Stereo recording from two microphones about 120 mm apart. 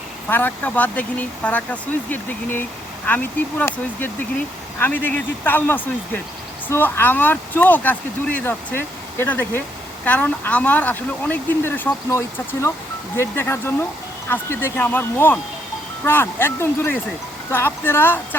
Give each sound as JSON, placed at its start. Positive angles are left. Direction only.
{"t": 0.3, "sound": "speech", "side_deg": 15}